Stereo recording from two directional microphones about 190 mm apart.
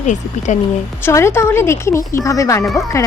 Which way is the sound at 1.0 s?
15° left (ahead or behind).